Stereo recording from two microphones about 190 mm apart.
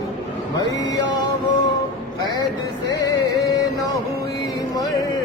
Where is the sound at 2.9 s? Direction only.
20° left (ahead or behind).